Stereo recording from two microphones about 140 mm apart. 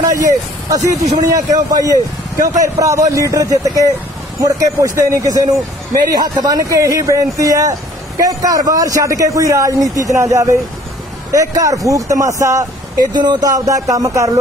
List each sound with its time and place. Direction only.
0.1 s a man's voice: 25° right (ahead or behind)